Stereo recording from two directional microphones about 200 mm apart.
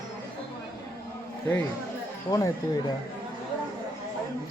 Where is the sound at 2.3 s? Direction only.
15° left (ahead or behind).